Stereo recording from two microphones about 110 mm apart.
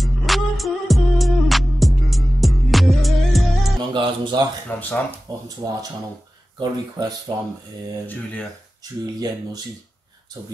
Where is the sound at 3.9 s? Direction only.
45° right (ahead or behind).